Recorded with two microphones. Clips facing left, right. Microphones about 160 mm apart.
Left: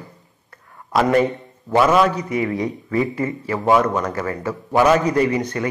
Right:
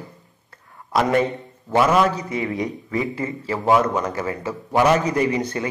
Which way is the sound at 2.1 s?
25° right (ahead or behind).